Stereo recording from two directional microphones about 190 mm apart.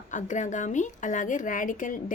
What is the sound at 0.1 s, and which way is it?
A woman's voice, 40° left (ahead or behind).